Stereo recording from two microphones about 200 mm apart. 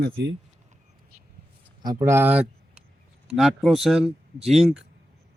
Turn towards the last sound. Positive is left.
turn(degrees=0)  # may be behind; listen again after turning